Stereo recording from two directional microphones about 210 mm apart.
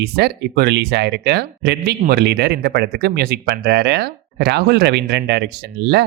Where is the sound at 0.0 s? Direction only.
50° right (ahead or behind).